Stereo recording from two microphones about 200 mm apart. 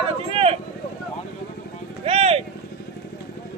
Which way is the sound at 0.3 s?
30° right (ahead or behind).